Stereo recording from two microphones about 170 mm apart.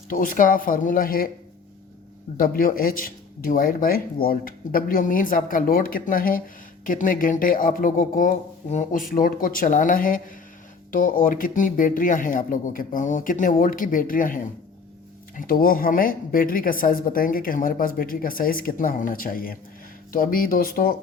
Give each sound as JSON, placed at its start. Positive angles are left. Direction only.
{"t": 0.1, "sound": "speech", "side_deg": 55}
{"t": 2.4, "sound": "speech", "side_deg": 55}